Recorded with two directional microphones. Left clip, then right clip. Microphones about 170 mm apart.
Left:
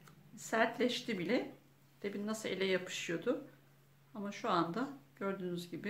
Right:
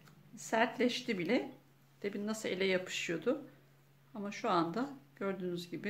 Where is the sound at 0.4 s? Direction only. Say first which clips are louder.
Right 1 dB; 30° right (ahead or behind).